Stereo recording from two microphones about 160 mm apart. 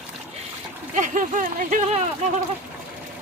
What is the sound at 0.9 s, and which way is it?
Speech, 50° right (ahead or behind).